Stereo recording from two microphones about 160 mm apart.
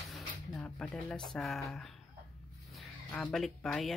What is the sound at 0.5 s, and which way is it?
Speech, 10° left (ahead or behind).